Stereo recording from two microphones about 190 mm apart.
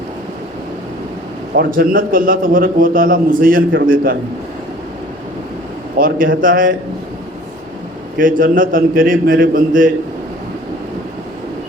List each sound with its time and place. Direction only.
1.5 s a man's voice: 50° right (ahead or behind)
6.0 s a man's voice: 50° right (ahead or behind)
8.2 s a man's voice: 45° right (ahead or behind)